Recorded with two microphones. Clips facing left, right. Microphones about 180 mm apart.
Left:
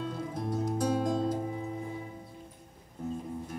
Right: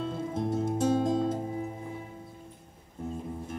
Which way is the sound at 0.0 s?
25° right (ahead or behind).